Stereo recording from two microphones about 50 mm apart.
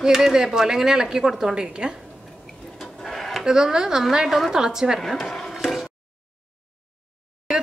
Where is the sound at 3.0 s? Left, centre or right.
Centre.